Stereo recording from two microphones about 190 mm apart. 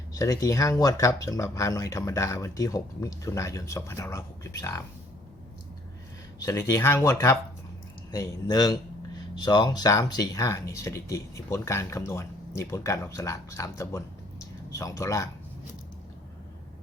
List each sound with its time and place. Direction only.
0.1 s speech: 15° left (ahead or behind)
6.4 s speech: 15° left (ahead or behind)